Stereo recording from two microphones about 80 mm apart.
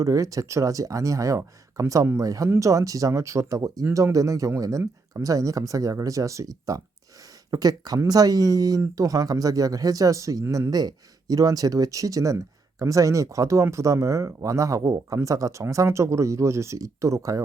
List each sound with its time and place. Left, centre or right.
0.0 s speech: right
10.7 s speech: right